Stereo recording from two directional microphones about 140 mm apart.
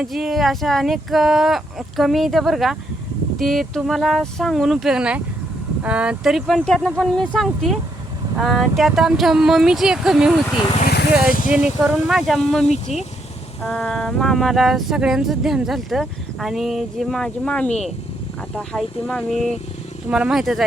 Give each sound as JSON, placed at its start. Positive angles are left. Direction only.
{"t": 0.0, "sound": "speech", "side_deg": 0}
{"t": 11.4, "sound": "speech", "side_deg": -5}
{"t": 12.6, "sound": "speech", "side_deg": 50}
{"t": 13.7, "sound": "speech", "side_deg": 0}
{"t": 20.1, "sound": "speech", "side_deg": -5}